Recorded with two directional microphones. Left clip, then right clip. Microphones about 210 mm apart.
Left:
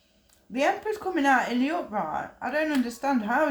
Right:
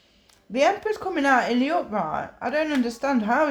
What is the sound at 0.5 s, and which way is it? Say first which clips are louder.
Speech: right 4 dB; 40° right (ahead or behind).